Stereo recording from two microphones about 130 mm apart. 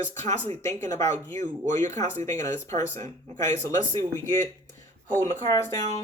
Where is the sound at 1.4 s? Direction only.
70° right (ahead or behind).